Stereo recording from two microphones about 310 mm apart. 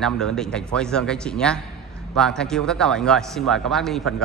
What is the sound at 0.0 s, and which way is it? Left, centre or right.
A man's voice, centre.